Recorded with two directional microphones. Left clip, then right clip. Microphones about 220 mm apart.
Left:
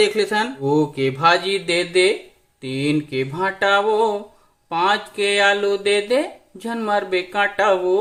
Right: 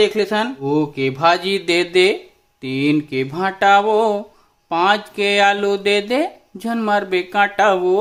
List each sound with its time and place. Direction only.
0.0 s speech: 30° right (ahead or behind)
0.6 s speech: 15° right (ahead or behind)
1.0 s speech: 30° right (ahead or behind)